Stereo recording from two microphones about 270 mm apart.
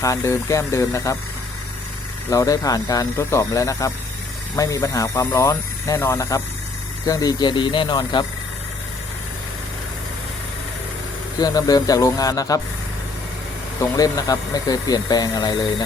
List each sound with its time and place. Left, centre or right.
0.0 s speech: centre
2.3 s speech: centre
11.3 s speech: centre
13.9 s speech: centre